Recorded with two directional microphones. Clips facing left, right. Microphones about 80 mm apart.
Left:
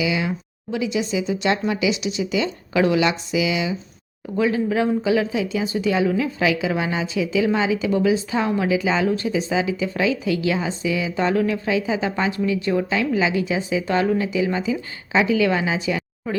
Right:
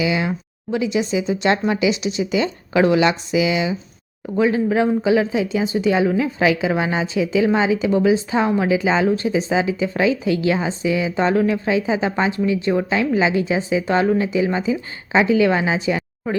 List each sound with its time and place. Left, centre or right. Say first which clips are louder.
0.0 s speech: right 2 dB; right